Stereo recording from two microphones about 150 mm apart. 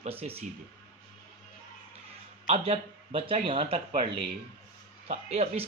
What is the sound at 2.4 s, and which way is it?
Speech, 45° right (ahead or behind).